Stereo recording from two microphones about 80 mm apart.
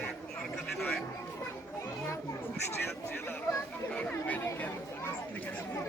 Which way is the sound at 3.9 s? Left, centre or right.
Centre.